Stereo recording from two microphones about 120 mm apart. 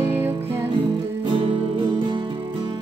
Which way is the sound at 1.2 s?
45° right (ahead or behind).